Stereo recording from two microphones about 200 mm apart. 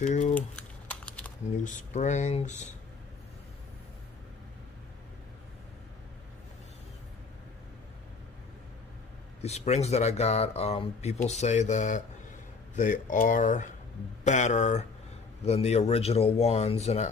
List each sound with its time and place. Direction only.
0.0 s speech: 35° left (ahead or behind)
0.3 s typing: 5° left (ahead or behind)
1.6 s speech: 40° left (ahead or behind)
9.4 s speech: 35° left (ahead or behind)